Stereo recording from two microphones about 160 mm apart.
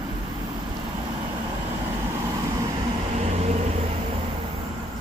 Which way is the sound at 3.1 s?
45° right (ahead or behind).